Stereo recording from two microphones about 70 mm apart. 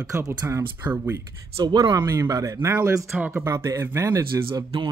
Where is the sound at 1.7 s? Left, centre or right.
Right.